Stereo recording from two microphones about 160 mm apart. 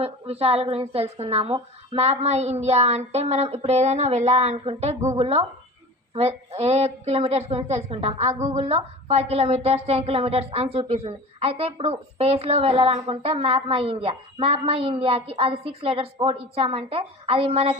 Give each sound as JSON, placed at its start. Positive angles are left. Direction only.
{"t": 0.0, "sound": "a woman's voice", "side_deg": -40}